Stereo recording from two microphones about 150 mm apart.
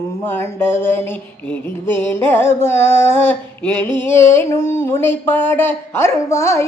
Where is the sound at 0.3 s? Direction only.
15° left (ahead or behind).